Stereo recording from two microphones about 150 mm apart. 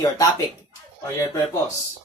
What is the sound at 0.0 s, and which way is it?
Speech, 25° left (ahead or behind).